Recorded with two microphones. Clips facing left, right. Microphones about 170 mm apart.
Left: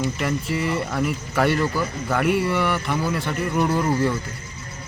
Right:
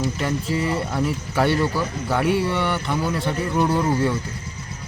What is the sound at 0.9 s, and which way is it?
Speech, centre (ahead or behind).